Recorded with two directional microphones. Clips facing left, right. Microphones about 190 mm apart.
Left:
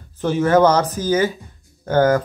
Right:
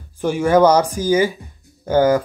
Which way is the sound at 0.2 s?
10° right (ahead or behind).